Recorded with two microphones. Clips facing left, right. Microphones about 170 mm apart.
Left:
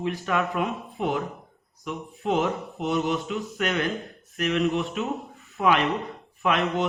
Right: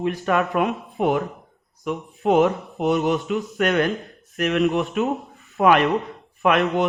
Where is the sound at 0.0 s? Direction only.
60° right (ahead or behind).